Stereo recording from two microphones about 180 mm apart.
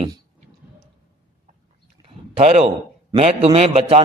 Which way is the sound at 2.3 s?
35° right (ahead or behind).